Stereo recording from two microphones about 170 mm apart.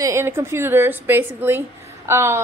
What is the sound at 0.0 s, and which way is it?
A woman's voice, 15° right (ahead or behind).